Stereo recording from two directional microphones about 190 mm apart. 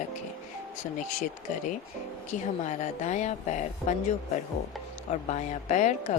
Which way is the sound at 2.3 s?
40° left (ahead or behind).